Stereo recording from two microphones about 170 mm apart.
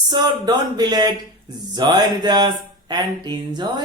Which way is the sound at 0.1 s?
25° right (ahead or behind).